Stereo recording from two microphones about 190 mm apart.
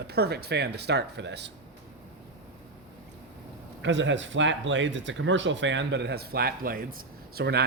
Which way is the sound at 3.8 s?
75° right (ahead or behind).